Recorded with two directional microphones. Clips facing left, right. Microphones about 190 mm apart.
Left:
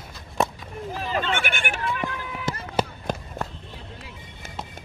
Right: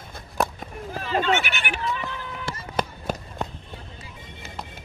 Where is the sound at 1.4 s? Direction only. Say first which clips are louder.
Left 1 dB; 50° left (ahead or behind).